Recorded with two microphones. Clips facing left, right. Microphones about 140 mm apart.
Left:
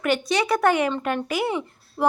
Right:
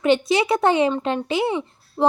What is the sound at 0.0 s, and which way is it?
Speech, 25° right (ahead or behind).